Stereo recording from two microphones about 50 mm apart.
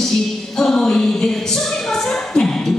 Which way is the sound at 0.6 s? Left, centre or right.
Centre.